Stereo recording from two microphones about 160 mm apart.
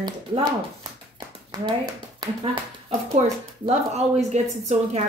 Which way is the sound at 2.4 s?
30° right (ahead or behind).